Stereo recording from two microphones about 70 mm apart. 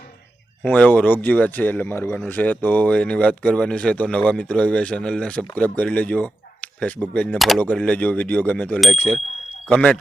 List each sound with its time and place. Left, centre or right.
0.7 s a man's voice: left
7.3 s speech: centre
7.8 s a man's voice: centre